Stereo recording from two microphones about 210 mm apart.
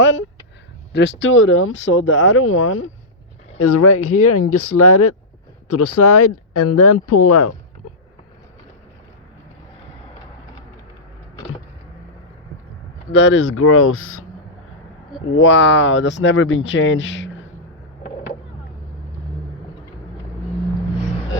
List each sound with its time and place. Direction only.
0.0 s speech: 60° left (ahead or behind)
3.6 s speech: 90° left
13.1 s speech: 60° left (ahead or behind); by 14.3 s 85° left
15.3 s speech: 65° left (ahead or behind)